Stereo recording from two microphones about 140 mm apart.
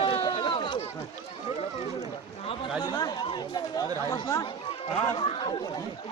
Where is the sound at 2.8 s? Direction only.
30° left (ahead or behind).